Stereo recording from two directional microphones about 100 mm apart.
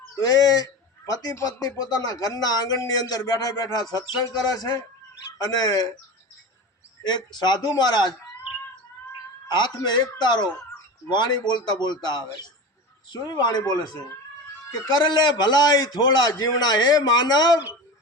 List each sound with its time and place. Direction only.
0.2 s speech: 40° left (ahead or behind)
7.3 s a man's voice: 45° left (ahead or behind)
9.5 s a man's voice: 45° left (ahead or behind)